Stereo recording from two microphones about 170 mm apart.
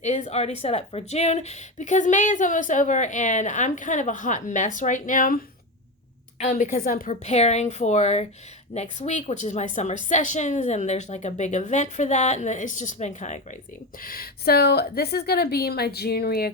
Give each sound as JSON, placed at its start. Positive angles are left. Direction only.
{"t": 0.3, "sound": "a woman's voice", "side_deg": 40}
{"t": 6.4, "sound": "a woman's voice", "side_deg": 45}
{"t": 14.0, "sound": "a woman's voice", "side_deg": 60}